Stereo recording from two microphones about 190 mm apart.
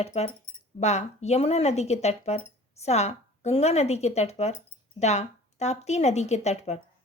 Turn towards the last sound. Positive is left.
turn(degrees=35)  # may be behind; listen again after turning